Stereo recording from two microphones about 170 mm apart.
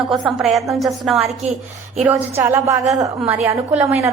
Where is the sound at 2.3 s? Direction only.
15° right (ahead or behind).